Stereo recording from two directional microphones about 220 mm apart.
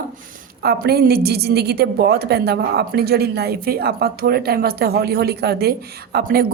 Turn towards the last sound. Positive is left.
turn(degrees=-45)  # may be behind; listen again after turning